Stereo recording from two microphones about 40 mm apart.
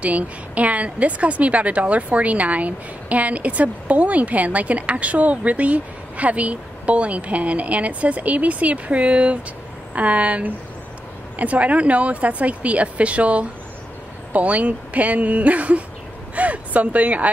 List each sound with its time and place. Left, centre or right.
0.0 s a woman's voice: right